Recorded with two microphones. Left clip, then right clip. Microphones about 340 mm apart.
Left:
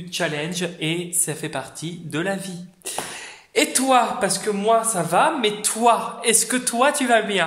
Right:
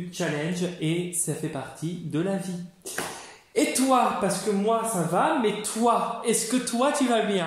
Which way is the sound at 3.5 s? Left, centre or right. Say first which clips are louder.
Left 4 dB; left.